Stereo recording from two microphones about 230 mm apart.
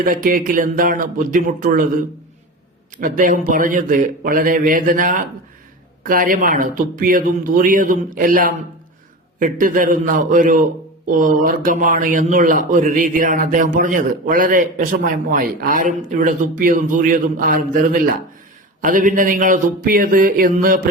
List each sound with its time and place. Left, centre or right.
0.0 s speech: right
3.0 s speech: right